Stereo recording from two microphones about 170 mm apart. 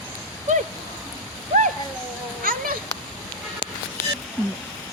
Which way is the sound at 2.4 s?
55° right (ahead or behind).